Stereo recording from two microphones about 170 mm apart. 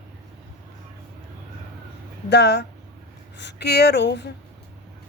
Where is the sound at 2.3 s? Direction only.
80° left.